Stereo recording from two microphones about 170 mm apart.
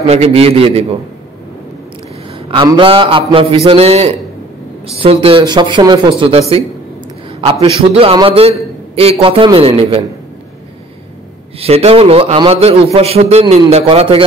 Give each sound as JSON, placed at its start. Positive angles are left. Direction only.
{"t": 0.0, "sound": "a man's voice", "side_deg": -40}
{"t": 2.5, "sound": "a man's voice", "side_deg": -25}
{"t": 8.0, "sound": "a man's voice", "side_deg": -35}
{"t": 11.6, "sound": "a man's voice", "side_deg": -35}